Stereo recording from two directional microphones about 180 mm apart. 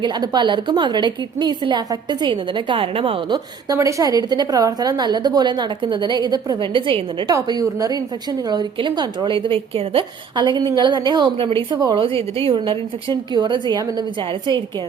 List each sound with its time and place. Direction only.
0.0 s a woman's voice: 25° right (ahead or behind)